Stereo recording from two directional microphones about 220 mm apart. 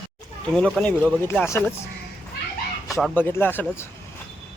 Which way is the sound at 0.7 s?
5° left (ahead or behind).